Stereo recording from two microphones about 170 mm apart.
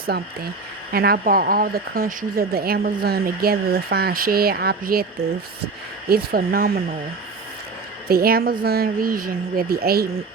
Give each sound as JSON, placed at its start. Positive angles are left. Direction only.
{"t": 0.9, "sound": "speech", "side_deg": -65}
{"t": 6.1, "sound": "speech", "side_deg": -65}
{"t": 8.0, "sound": "speech", "side_deg": -65}